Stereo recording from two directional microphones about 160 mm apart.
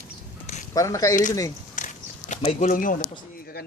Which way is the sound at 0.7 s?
20° left (ahead or behind).